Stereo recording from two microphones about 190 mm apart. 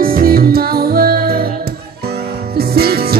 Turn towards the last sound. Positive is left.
turn(degrees=-55)  # may be behind; listen again after turning